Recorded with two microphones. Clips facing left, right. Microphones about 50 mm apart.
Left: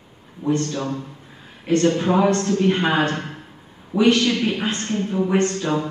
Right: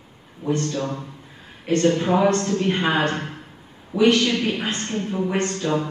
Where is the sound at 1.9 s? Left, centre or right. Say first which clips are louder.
Left 1 dB; centre.